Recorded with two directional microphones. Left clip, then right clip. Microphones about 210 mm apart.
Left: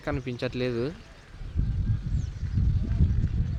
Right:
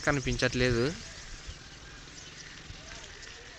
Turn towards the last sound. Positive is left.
turn(degrees=60)  # may be behind; listen again after turning